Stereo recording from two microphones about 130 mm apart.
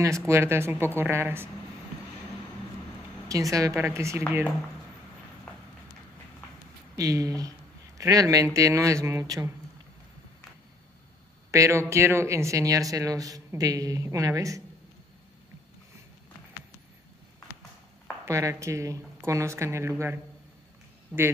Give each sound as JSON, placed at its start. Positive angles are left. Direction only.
{"t": 0.3, "sound": "speech", "side_deg": -20}
{"t": 3.3, "sound": "speech", "side_deg": -25}
{"t": 7.0, "sound": "speech", "side_deg": -25}
{"t": 11.5, "sound": "speech", "side_deg": -25}
{"t": 18.2, "sound": "speech", "side_deg": -25}
{"t": 21.1, "sound": "speech", "side_deg": 0}